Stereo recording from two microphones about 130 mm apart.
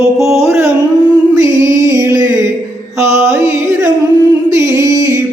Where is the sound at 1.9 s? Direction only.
25° right (ahead or behind).